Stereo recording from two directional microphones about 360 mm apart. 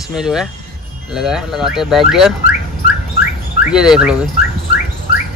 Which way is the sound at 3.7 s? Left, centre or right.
Centre.